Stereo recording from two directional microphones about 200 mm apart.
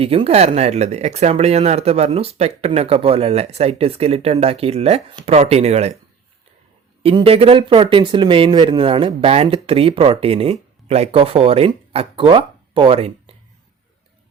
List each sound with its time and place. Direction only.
0.0 s speech: 30° right (ahead or behind)
7.0 s speech: 30° right (ahead or behind)